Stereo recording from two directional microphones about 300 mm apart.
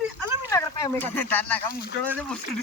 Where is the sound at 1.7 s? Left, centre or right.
Left.